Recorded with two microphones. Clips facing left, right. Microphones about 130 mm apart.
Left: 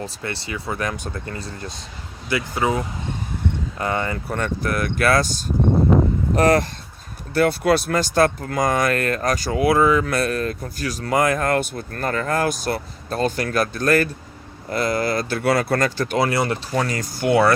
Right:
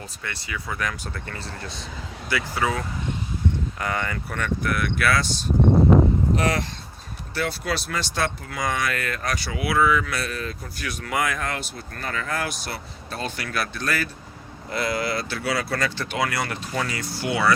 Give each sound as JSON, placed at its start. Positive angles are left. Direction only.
{"t": 0.0, "sound": "speech", "side_deg": 30}